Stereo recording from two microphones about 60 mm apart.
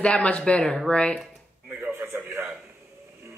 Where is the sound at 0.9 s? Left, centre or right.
Centre.